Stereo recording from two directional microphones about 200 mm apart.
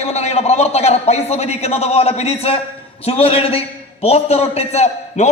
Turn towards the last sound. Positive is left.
turn(degrees=35)  # may be behind; listen again after turning